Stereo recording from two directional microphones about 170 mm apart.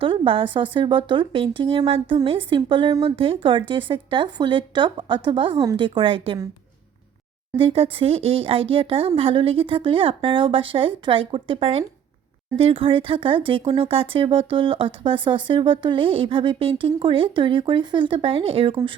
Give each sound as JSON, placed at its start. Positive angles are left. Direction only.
{"t": 0.0, "sound": "speech", "side_deg": -30}
{"t": 7.5, "sound": "speech", "side_deg": -30}